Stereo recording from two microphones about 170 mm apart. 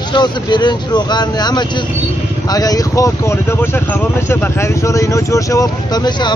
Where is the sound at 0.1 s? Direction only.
25° left (ahead or behind).